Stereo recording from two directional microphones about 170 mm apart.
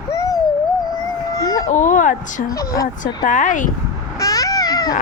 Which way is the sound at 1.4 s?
20° left (ahead or behind).